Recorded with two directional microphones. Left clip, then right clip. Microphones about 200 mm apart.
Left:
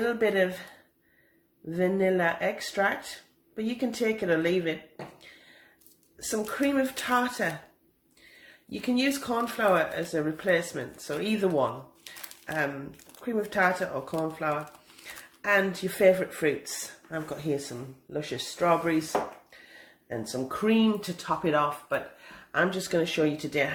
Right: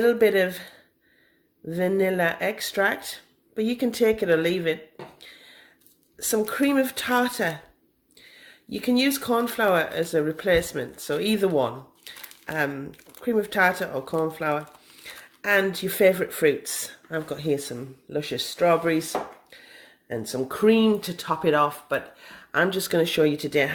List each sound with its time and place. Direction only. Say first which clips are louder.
0.0 s speech: right 6 dB; 45° right (ahead or behind)
1.7 s speech: right 2 dB; 45° right (ahead or behind)
6.1 s speech: right 6 dB; 45° right (ahead or behind)
8.7 s speech: right 4 dB; 45° right (ahead or behind)
20.1 s speech: right 4 dB; 50° right (ahead or behind)